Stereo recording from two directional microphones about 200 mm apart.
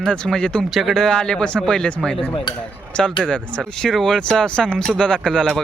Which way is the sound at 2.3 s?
20° left (ahead or behind).